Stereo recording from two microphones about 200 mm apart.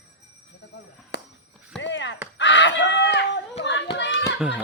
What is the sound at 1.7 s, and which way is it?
Clip-clop, 65° left (ahead or behind).